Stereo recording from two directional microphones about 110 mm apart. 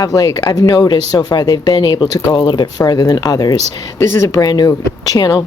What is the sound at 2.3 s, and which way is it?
Speech, 45° left (ahead or behind).